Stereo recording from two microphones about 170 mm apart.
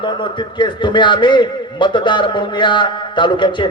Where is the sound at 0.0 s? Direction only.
30° left (ahead or behind).